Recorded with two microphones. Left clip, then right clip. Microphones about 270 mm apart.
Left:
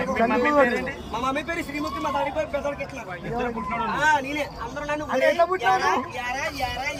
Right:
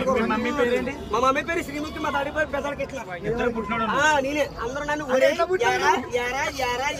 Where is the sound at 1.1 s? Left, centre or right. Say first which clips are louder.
Right 5 dB; centre.